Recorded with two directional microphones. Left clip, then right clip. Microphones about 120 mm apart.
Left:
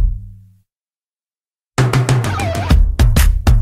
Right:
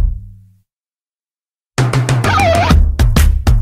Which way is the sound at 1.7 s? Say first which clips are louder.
Even; 40° right (ahead or behind).